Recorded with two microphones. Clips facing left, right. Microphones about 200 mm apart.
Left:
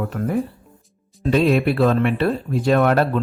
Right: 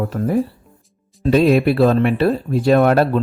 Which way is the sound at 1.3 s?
40° right (ahead or behind).